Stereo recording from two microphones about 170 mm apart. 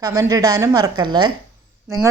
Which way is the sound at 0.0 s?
20° right (ahead or behind).